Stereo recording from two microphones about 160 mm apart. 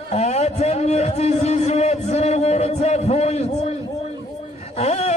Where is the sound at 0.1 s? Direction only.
40° left (ahead or behind).